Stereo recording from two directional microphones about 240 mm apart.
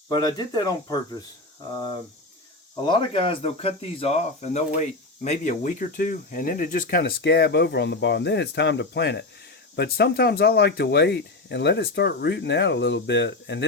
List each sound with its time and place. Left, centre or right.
0.1 s speech: centre
2.8 s speech: left